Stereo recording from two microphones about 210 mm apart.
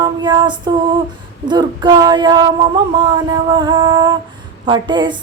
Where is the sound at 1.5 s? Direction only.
20° right (ahead or behind).